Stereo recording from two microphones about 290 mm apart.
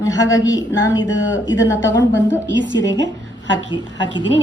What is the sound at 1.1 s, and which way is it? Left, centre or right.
Speech, left.